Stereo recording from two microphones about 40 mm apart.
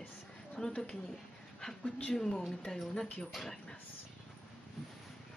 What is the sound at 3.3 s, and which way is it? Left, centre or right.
Speech, centre.